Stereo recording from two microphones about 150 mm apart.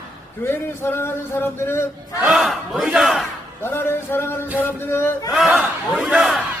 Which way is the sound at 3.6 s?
15° left (ahead or behind).